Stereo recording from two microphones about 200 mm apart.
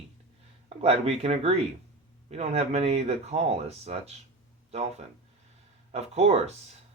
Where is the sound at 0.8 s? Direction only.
30° right (ahead or behind).